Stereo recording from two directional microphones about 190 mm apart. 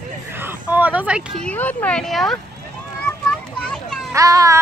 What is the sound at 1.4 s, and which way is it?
Speech, 10° left (ahead or behind).